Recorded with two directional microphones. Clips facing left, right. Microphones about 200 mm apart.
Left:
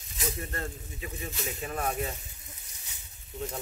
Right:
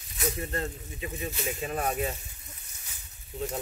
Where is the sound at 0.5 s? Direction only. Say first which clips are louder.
Right 4 dB; 20° right (ahead or behind).